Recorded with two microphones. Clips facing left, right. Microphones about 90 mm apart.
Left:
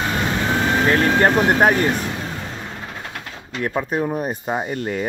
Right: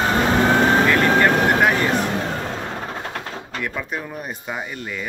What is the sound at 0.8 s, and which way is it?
Speech, 35° left (ahead or behind).